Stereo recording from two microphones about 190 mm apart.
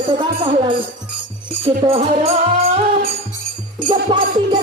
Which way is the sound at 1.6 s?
30° right (ahead or behind).